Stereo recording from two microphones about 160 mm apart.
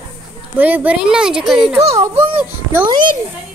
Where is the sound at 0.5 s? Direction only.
10° right (ahead or behind).